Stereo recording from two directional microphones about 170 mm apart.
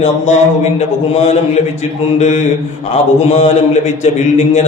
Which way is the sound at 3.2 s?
40° left (ahead or behind).